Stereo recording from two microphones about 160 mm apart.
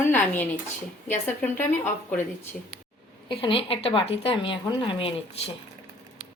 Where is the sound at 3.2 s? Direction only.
35° left (ahead or behind).